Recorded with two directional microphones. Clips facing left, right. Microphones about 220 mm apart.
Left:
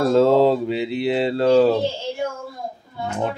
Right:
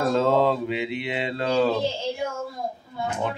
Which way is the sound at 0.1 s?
35° left (ahead or behind).